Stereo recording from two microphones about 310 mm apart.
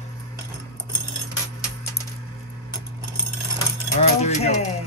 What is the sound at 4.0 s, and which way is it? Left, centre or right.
Speech, left.